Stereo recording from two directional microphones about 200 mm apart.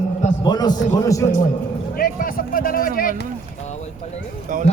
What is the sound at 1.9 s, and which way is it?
Speech, 45° left (ahead or behind).